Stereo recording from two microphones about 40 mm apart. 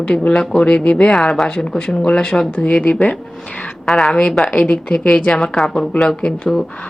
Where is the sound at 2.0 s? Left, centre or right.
Left.